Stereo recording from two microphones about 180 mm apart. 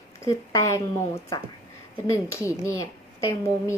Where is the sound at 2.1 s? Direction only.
15° left (ahead or behind).